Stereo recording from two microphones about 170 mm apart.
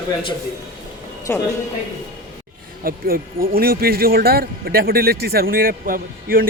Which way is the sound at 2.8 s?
60° right (ahead or behind).